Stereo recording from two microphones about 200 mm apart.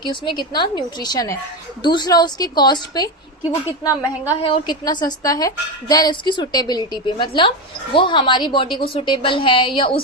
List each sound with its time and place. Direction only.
0.0 s a woman's voice: 25° left (ahead or behind)
4.4 s a woman's voice: 25° left (ahead or behind)